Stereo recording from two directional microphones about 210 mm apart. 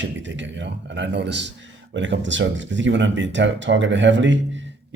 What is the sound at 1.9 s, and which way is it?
Speech, 60° right (ahead or behind).